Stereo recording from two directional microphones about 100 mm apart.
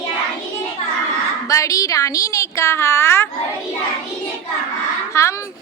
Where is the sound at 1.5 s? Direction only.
35° left (ahead or behind).